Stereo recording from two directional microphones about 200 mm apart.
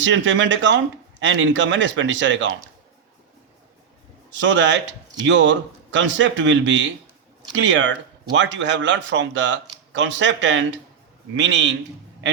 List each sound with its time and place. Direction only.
0.0 s speech: 70° right (ahead or behind)
4.3 s a man's voice: 65° right (ahead or behind)